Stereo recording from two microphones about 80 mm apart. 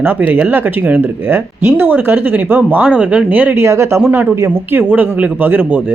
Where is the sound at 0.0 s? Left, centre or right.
Right.